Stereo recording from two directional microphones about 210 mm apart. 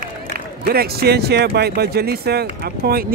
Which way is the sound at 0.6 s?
45° right (ahead or behind).